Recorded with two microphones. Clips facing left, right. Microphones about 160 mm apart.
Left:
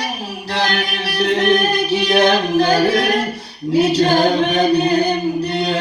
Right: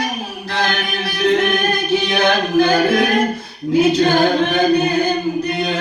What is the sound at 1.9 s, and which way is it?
Music, 35° left (ahead or behind).